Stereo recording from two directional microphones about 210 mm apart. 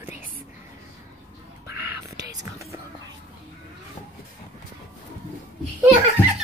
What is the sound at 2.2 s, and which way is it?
Whispering, 15° right (ahead or behind).